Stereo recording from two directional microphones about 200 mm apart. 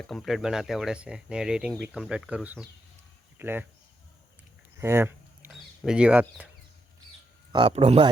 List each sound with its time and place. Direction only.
0.0 s speech: centre (ahead or behind)
4.8 s a sound: 10° right (ahead or behind)
5.5 s speech: centre (ahead or behind)
7.5 s speech: 25° right (ahead or behind)